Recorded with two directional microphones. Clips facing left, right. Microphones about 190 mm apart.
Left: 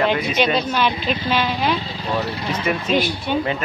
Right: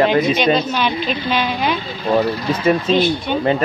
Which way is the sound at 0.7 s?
Centre (ahead or behind).